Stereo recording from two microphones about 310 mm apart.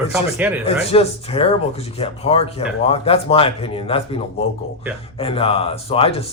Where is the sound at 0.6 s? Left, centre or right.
Centre.